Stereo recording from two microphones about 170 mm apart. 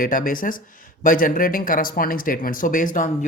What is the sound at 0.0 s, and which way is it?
Speech, 55° left (ahead or behind).